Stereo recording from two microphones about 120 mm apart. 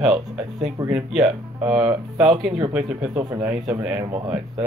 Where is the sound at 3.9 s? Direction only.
40° right (ahead or behind).